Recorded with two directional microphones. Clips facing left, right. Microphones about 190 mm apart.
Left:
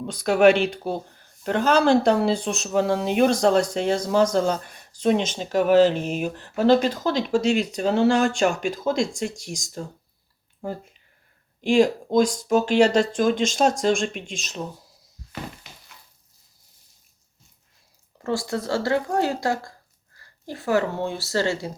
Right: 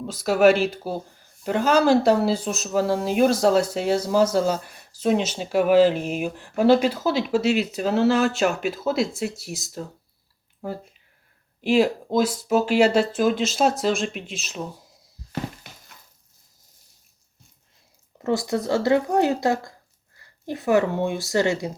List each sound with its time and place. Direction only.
0.0 s speech: 5° right (ahead or behind)
18.2 s speech: 20° right (ahead or behind)